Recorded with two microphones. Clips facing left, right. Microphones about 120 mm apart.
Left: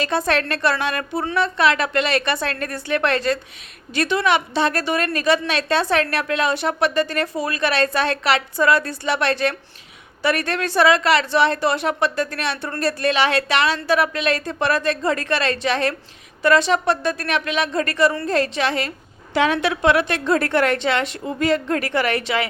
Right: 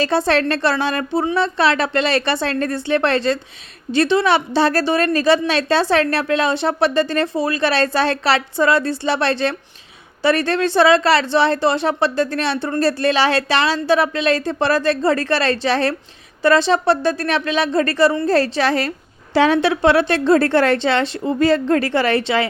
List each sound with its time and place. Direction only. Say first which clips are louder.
0.0 s a woman's voice: right 4 dB; 30° right (ahead or behind)